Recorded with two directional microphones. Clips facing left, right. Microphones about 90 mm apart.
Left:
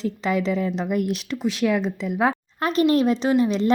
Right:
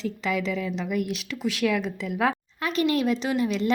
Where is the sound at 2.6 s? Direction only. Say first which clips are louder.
Left 5 dB; 40° left (ahead or behind).